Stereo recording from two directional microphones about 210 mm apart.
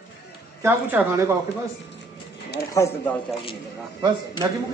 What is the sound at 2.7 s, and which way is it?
Speech, 15° left (ahead or behind).